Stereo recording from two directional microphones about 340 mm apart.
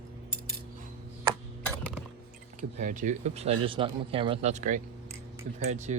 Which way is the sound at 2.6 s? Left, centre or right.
Right.